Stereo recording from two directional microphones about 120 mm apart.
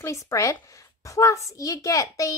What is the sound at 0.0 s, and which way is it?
A woman's voice, 25° left (ahead or behind).